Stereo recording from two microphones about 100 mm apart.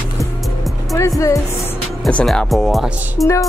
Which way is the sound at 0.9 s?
30° left (ahead or behind).